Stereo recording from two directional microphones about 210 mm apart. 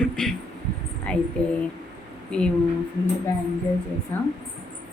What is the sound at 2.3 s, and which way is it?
Speech, 5° left (ahead or behind).